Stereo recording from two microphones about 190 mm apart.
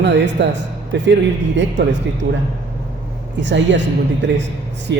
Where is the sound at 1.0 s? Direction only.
70° right (ahead or behind).